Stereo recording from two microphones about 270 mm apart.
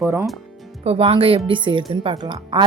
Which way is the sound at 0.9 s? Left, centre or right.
Right.